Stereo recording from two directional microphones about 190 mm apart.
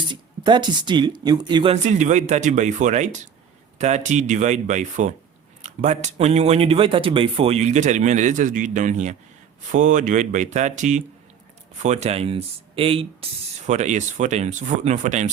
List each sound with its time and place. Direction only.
0.1 s speech: 25° right (ahead or behind); by 15.3 s 40° right (ahead or behind)